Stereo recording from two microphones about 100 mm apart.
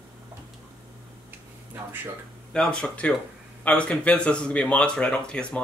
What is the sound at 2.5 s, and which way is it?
Speech, 10° left (ahead or behind).